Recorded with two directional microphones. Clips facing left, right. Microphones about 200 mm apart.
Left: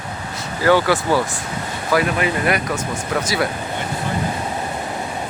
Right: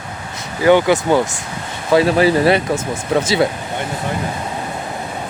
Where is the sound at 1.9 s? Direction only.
35° right (ahead or behind).